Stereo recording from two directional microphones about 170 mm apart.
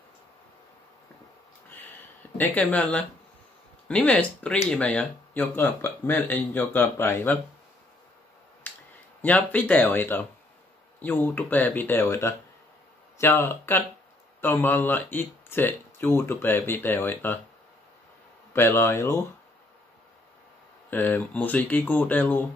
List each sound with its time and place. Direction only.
2.3 s speech: 10° left (ahead or behind)
8.6 s finger snapping: 10° left (ahead or behind)
9.2 s speech: 10° left (ahead or behind)
18.5 s speech: 15° left (ahead or behind)
20.9 s speech: 10° left (ahead or behind)